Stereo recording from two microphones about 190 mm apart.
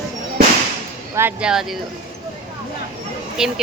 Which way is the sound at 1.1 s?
10° right (ahead or behind).